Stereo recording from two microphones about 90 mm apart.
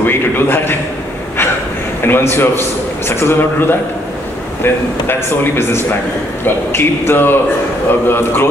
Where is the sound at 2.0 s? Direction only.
25° left (ahead or behind).